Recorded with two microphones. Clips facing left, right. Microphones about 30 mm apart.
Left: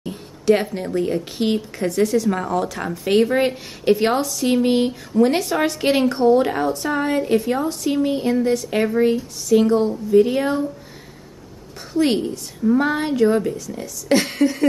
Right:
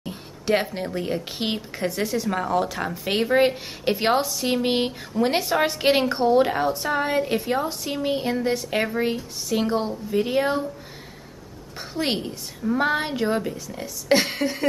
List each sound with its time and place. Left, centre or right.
0.5 s a woman's voice: centre
11.9 s a woman's voice: centre